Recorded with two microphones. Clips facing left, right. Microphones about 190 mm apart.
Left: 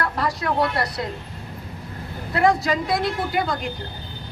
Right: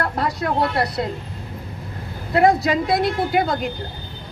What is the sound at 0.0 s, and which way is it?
Speech, 55° right (ahead or behind).